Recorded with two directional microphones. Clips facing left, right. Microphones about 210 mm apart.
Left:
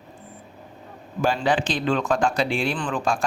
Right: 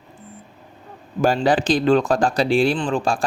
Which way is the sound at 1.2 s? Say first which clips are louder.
Right 4 dB; 40° right (ahead or behind).